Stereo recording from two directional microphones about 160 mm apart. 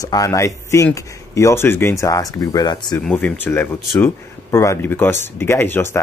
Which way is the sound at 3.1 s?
10° left (ahead or behind).